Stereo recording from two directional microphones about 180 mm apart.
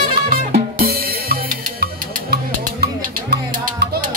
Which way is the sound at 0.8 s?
55° right (ahead or behind).